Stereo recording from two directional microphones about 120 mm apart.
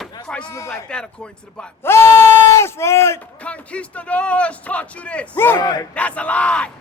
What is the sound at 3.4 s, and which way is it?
Speech, 10° left (ahead or behind).